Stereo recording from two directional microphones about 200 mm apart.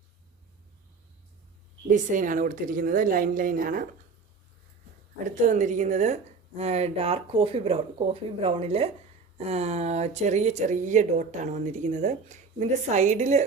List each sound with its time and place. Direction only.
1.9 s a woman's voice: 40° right (ahead or behind)
5.2 s speech: 40° right (ahead or behind)